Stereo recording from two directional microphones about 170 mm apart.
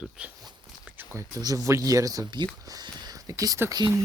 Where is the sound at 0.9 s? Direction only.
20° right (ahead or behind).